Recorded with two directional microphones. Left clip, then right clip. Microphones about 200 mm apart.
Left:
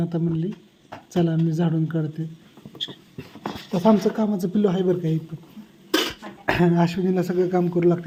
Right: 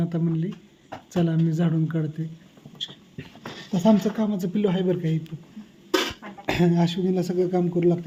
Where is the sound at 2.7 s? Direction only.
10° left (ahead or behind).